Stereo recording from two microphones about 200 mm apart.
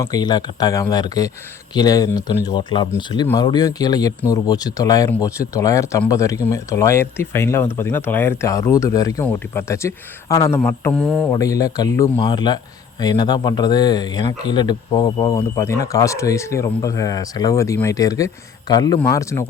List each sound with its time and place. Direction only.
0.0 s speech: 20° left (ahead or behind); by 11.3 s 5° left (ahead or behind)
11.3 s speech: 15° left (ahead or behind)